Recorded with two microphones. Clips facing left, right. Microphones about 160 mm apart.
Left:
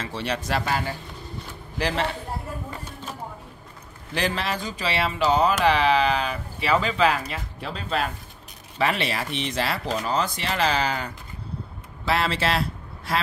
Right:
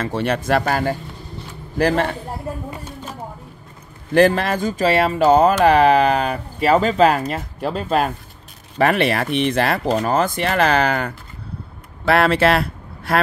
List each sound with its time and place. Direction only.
0.0 s speech: 55° right (ahead or behind)
4.1 s speech: 50° right (ahead or behind)